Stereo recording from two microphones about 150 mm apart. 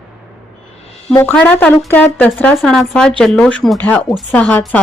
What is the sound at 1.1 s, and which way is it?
A woman's voice, 15° left (ahead or behind).